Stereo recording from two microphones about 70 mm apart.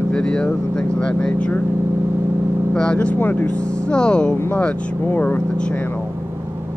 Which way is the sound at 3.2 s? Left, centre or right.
Left.